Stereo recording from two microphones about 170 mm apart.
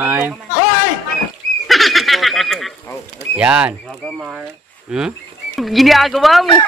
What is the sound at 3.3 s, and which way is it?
Speech, 5° right (ahead or behind).